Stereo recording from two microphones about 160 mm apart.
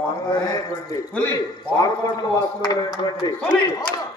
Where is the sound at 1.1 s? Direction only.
10° left (ahead or behind).